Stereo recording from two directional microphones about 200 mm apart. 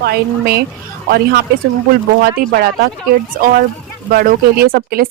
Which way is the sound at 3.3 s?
45° right (ahead or behind).